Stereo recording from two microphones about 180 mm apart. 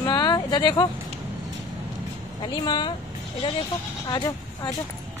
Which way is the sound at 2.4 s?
25° left (ahead or behind).